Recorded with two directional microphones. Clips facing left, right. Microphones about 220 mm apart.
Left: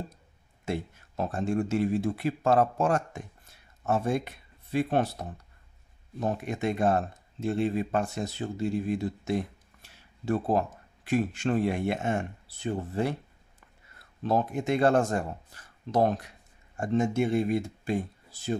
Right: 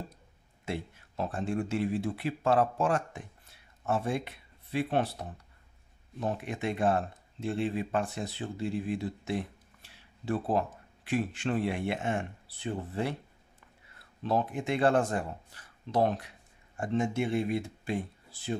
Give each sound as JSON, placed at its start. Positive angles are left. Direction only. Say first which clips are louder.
{"t": 0.7, "sound": "speech", "louder": "left 4 dB", "side_deg": 45}
{"t": 6.1, "sound": "speech", "louder": "left 3 dB", "side_deg": 45}
{"t": 14.2, "sound": "speech", "louder": "left 3 dB", "side_deg": 45}